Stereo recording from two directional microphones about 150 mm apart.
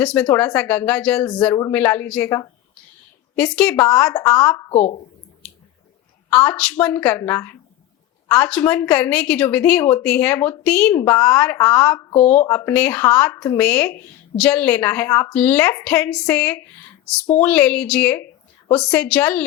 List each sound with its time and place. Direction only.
0.0 s a woman's voice: 10° left (ahead or behind)
4.7 s a woman's voice: 45° left (ahead or behind)
6.3 s a woman's voice: 10° left (ahead or behind)
12.2 s a woman's voice: 45° left (ahead or behind)
12.5 s a woman's voice: 15° left (ahead or behind)
13.6 s a woman's voice: 10° left (ahead or behind)